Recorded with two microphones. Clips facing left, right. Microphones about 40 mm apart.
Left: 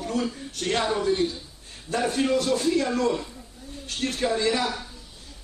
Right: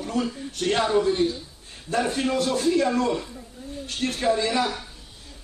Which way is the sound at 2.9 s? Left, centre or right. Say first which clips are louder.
Even; right.